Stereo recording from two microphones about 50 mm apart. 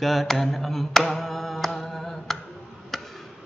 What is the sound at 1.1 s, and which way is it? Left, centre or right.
Singing, centre.